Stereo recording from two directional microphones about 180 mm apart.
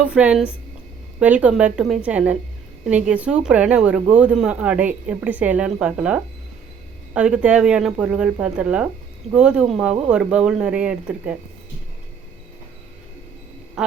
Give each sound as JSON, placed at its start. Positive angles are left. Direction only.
{"t": 0.0, "sound": "a woman's voice", "side_deg": -5}
{"t": 13.8, "sound": "speech", "side_deg": -5}